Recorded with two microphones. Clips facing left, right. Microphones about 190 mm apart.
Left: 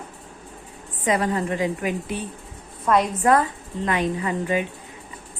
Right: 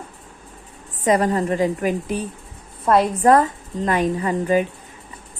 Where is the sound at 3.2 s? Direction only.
40° right (ahead or behind).